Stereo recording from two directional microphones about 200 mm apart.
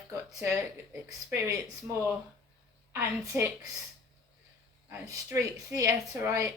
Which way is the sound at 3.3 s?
15° right (ahead or behind).